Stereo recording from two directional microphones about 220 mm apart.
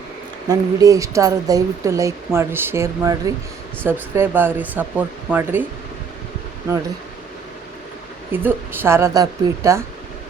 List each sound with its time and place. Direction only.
0.4 s speech: 15° right (ahead or behind)
8.3 s speech: 10° right (ahead or behind)